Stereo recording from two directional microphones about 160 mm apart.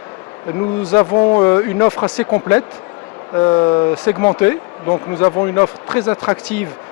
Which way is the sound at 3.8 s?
15° left (ahead or behind).